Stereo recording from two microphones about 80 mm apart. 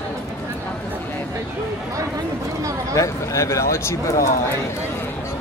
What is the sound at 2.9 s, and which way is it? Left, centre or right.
Speech, left.